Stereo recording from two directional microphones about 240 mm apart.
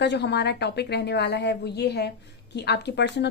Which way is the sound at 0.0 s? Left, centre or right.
Left.